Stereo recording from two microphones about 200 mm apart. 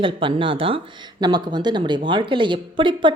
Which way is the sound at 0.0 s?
25° right (ahead or behind).